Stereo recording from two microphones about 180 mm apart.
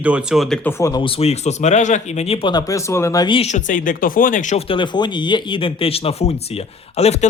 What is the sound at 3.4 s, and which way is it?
Speech, 40° left (ahead or behind).